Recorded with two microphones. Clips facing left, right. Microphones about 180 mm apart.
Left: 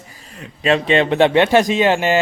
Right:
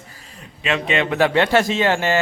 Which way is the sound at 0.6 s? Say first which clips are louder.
Left 6 dB; 35° left (ahead or behind).